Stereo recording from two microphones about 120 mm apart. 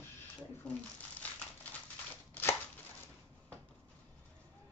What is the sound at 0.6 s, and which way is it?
Shuffling cards, 10° left (ahead or behind).